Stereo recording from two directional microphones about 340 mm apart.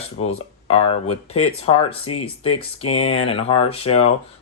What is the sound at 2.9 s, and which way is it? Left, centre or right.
Speech, centre.